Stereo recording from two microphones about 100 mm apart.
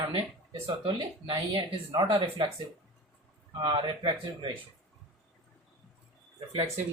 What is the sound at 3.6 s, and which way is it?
Speech, 50° right (ahead or behind).